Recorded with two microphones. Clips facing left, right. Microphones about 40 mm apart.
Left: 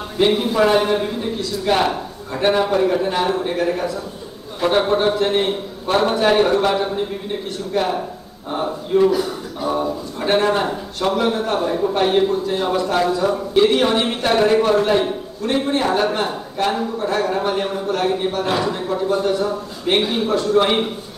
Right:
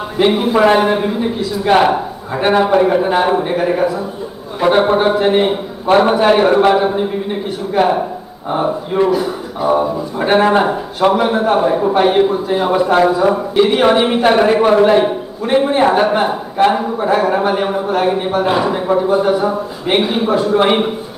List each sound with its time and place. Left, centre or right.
0.2 s a man's voice: centre